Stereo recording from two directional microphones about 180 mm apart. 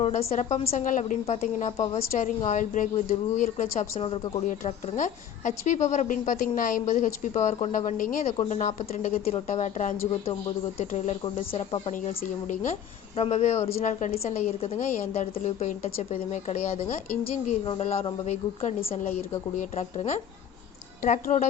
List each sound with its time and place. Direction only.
0.0 s a woman's voice: 35° left (ahead or behind)
4.4 s a woman's voice: 45° left (ahead or behind)